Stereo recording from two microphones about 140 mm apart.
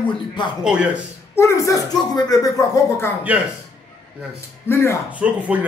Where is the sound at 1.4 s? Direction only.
20° left (ahead or behind).